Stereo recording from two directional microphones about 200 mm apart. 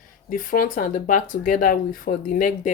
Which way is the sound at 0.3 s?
45° left (ahead or behind).